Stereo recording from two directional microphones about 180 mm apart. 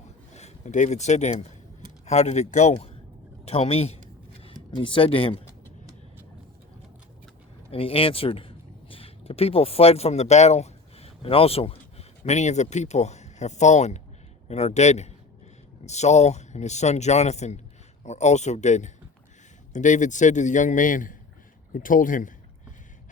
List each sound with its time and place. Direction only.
0.3 s a man's voice: 40° left (ahead or behind)
7.7 s a man's voice: 30° left (ahead or behind); by 22.3 s 50° left (ahead or behind)